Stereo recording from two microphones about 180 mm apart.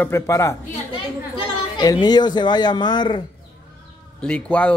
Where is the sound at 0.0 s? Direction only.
15° left (ahead or behind).